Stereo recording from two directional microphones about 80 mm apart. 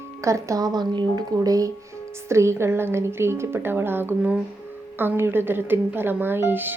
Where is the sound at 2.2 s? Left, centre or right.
Right.